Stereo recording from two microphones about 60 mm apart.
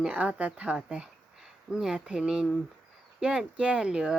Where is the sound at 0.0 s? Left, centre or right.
Centre.